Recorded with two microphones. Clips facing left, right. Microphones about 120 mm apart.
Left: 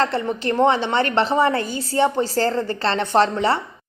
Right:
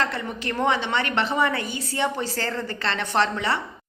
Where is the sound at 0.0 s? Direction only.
30° left (ahead or behind).